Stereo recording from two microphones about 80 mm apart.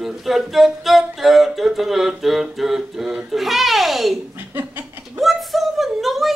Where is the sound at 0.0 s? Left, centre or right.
Centre.